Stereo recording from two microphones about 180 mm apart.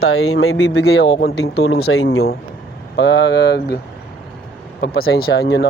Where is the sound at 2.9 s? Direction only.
75° left (ahead or behind).